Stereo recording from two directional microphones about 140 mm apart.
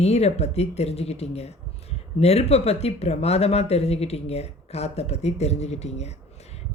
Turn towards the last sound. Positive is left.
turn(degrees=50)  # may be behind; listen again after turning